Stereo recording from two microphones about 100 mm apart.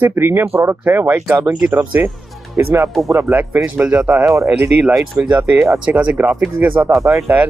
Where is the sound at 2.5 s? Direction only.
30° right (ahead or behind); by 4.3 s 15° right (ahead or behind).